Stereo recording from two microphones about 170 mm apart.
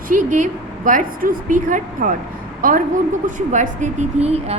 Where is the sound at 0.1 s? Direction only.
50° right (ahead or behind).